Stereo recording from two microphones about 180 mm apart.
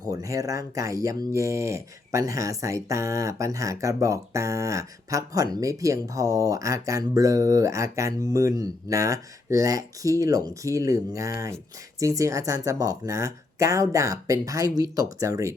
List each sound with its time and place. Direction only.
0.0 s speech: 20° right (ahead or behind)